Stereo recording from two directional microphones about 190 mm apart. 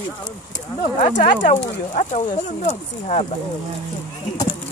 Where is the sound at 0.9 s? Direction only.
40° left (ahead or behind).